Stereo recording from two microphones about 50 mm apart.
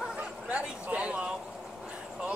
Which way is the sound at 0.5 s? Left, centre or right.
Right.